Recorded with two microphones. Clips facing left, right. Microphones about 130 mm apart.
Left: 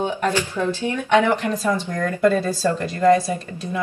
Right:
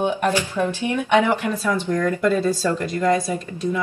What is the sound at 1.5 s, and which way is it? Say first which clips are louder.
Speech: left 1 dB; 15° left (ahead or behind).